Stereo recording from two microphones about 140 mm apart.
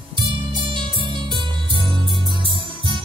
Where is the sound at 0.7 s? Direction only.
35° right (ahead or behind).